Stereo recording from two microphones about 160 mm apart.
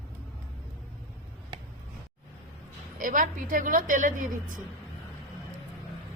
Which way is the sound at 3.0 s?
55° right (ahead or behind).